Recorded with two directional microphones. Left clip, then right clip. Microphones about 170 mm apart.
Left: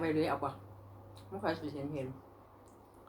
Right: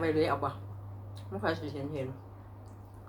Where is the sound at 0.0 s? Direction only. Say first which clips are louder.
Right 4 dB; 20° right (ahead or behind).